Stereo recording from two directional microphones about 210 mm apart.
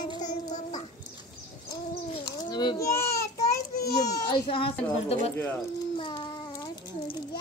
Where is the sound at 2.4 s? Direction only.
20° left (ahead or behind).